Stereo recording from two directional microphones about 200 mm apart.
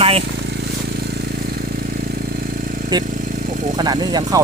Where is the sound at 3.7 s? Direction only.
20° right (ahead or behind).